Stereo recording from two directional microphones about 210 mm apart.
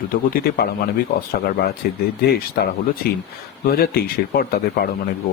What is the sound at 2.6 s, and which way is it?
Speech, 45° left (ahead or behind).